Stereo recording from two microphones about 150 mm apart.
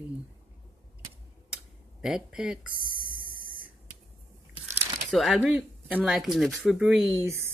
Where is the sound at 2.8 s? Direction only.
70° left (ahead or behind).